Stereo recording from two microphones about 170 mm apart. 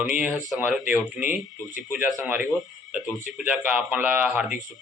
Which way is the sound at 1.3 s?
50° left (ahead or behind).